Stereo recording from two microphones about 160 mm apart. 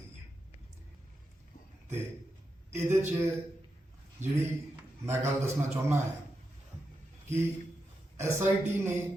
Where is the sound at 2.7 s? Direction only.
15° right (ahead or behind).